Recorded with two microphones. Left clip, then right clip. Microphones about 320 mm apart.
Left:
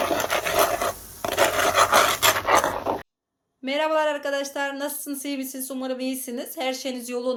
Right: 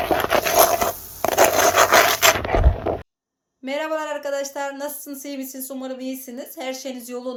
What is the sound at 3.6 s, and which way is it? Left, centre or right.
Speech, centre.